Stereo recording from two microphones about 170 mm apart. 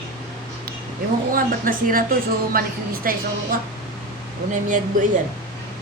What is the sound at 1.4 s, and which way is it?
Speech, 55° right (ahead or behind).